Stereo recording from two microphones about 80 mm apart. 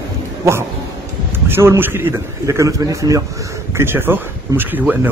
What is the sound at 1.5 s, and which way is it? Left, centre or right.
Speech, right.